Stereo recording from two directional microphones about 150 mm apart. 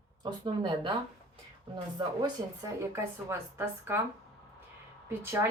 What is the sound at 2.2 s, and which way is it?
A woman's voice, 20° right (ahead or behind).